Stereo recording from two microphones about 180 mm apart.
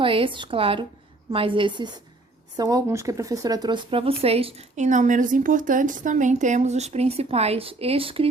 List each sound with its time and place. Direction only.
0.0 s a woman's voice: 30° right (ahead or behind)